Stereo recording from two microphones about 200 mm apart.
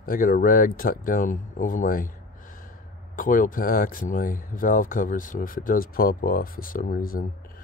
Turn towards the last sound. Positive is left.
turn(degrees=45)  # may be behind; listen again after turning